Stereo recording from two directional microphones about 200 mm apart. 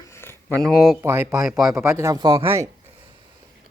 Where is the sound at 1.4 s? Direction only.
Centre (ahead or behind).